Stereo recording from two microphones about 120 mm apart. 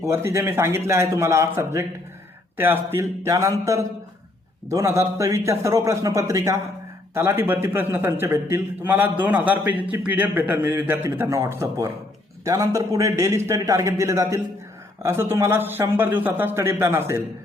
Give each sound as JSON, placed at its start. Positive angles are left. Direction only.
{"t": 0.0, "sound": "a man's voice", "side_deg": -20}